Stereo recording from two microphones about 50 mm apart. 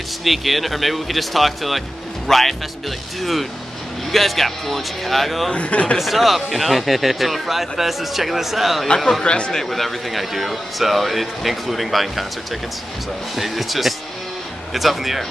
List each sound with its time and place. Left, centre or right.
0.2 s a man's voice: centre
5.5 s a man's voice: left
5.9 s speech: centre
8.8 s a man's voice: centre
9.6 s speech: centre
13.4 s speech: centre